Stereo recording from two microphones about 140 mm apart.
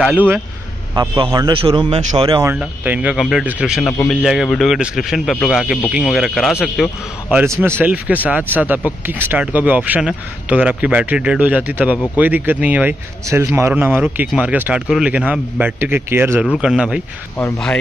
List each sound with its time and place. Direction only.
0.9 s a man's voice: 30° right (ahead or behind)
2.6 s speech: 10° right (ahead or behind)
7.6 s speech: 15° right (ahead or behind)